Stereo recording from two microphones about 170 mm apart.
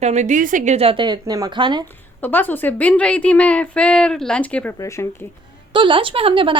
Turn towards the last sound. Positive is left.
turn(degrees=-30)  # may be behind; listen again after turning